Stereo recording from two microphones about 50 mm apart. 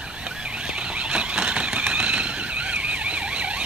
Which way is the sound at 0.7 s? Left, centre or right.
Right.